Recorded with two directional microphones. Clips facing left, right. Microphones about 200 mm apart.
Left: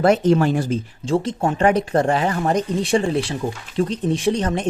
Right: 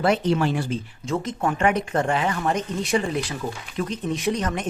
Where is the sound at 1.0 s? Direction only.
30° left (ahead or behind).